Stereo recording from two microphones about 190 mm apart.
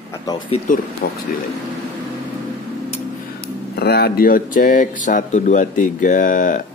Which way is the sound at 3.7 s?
55° left (ahead or behind).